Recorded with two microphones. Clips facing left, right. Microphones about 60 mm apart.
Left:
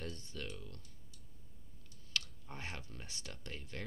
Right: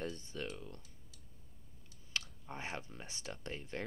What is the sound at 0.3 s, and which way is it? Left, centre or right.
Speech, right.